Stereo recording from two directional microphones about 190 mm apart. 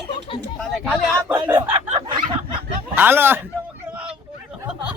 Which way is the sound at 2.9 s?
10° right (ahead or behind).